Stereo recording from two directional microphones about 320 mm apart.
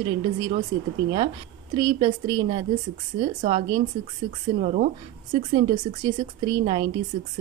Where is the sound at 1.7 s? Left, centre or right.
Centre.